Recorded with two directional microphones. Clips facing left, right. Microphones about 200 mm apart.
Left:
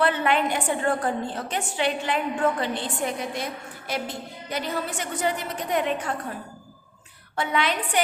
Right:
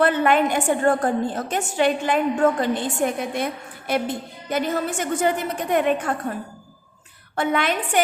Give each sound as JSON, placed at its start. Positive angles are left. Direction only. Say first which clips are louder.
{"t": 0.0, "sound": "a woman's voice", "louder": "right 4 dB", "side_deg": -50}
{"t": 7.3, "sound": "a woman's voice", "louder": "right 3 dB", "side_deg": -50}